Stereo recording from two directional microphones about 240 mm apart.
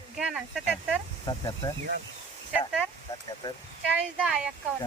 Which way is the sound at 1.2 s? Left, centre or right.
Centre.